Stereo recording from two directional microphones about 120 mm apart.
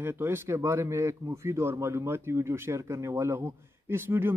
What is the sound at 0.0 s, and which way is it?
Speech, 15° right (ahead or behind).